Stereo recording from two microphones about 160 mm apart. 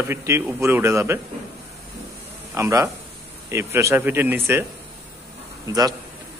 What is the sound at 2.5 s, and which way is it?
A man's voice, 20° right (ahead or behind).